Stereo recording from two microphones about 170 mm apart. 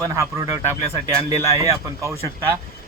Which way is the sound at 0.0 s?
15° right (ahead or behind).